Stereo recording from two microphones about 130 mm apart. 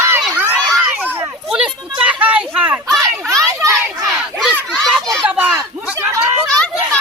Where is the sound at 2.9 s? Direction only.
5° left (ahead or behind).